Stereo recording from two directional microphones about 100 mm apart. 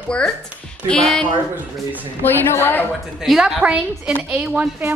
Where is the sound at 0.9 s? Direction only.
10° left (ahead or behind).